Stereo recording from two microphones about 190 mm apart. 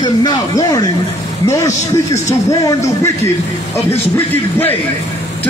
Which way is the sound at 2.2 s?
15° left (ahead or behind).